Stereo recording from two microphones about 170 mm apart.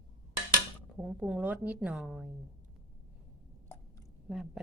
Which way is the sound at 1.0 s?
5° right (ahead or behind).